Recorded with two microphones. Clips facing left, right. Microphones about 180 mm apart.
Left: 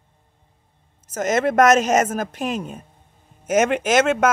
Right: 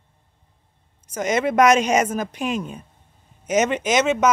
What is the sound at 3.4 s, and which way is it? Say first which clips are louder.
Speech: left 2 dB; 50° left (ahead or behind).